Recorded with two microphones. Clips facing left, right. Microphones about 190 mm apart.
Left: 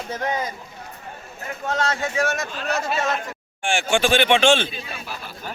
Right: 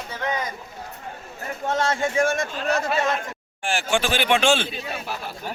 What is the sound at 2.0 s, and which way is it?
Speech, 30° right (ahead or behind).